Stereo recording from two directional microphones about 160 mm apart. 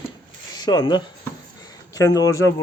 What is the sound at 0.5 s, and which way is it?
Speech, 25° left (ahead or behind).